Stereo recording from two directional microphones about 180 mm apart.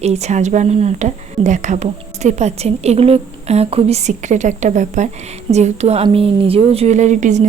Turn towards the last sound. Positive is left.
turn(degrees=-45)  # may be behind; listen again after turning